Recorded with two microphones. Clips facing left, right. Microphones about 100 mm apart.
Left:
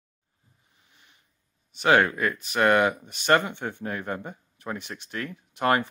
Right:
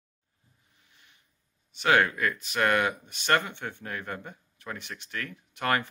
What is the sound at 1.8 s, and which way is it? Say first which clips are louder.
Speech: left 3 dB; 25° left (ahead or behind).